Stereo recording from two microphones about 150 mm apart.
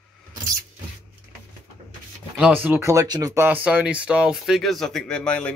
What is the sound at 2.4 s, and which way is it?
A man's voice, 10° right (ahead or behind).